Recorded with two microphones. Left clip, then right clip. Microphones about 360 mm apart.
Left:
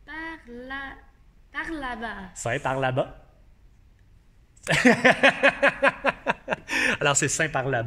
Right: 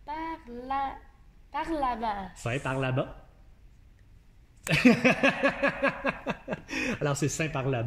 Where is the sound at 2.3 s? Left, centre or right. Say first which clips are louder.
Left 5 dB; centre.